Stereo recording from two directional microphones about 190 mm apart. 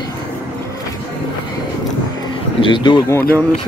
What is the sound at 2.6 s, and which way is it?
Speech, 25° left (ahead or behind).